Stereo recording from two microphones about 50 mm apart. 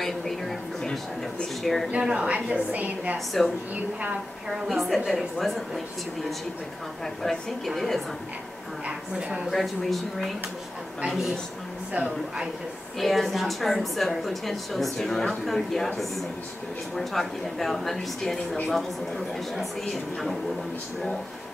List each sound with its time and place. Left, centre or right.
0.0 s a sound: centre
1.6 s speech: centre
1.9 s a woman's voice: centre
4.5 s speech: centre
7.2 s speech: centre
8.8 s a woman's voice: centre
9.5 s a woman's voice: centre
13.0 s speech: centre